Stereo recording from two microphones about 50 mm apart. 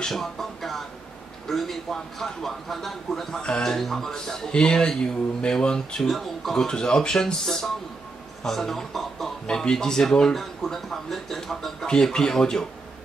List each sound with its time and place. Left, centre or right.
0.0 s speech: centre
6.0 s speech: centre